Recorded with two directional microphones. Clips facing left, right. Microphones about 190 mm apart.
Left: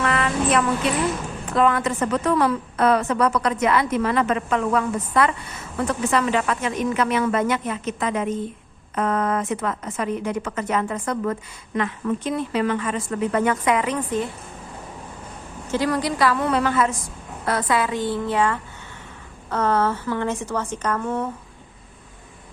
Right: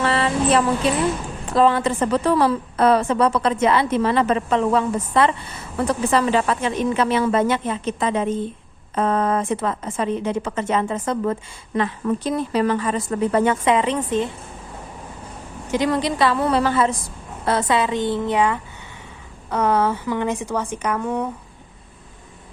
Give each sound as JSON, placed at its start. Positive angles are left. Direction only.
{"t": 0.0, "sound": "a sound", "side_deg": -30}
{"t": 1.5, "sound": "a woman's voice", "side_deg": -30}
{"t": 15.7, "sound": "a woman's voice", "side_deg": -20}